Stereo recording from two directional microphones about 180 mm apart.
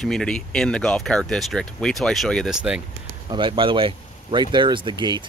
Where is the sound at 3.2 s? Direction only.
25° right (ahead or behind).